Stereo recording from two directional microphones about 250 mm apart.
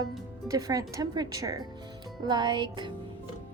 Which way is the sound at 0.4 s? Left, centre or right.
Centre.